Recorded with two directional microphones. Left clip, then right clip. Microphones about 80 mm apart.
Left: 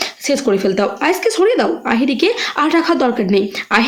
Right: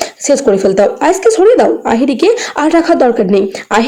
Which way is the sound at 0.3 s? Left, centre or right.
Right.